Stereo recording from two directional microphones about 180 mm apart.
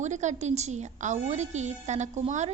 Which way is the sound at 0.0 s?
40° right (ahead or behind).